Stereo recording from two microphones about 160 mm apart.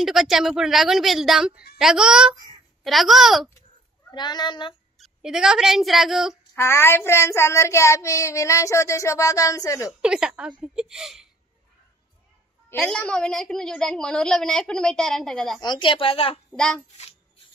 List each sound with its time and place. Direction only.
0.0 s a woman's voice: centre (ahead or behind)
4.1 s speech: 25° left (ahead or behind)
4.9 s speech: centre (ahead or behind)
6.5 s speech: 15° left (ahead or behind)
10.0 s a woman's voice: 5° right (ahead or behind)
12.7 s a woman's voice: 10° left (ahead or behind)
15.6 s a woman's voice: 30° left (ahead or behind)
16.5 s a woman's voice: 5° left (ahead or behind)